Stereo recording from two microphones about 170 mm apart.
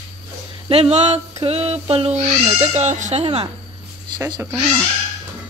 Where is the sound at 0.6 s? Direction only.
35° right (ahead or behind).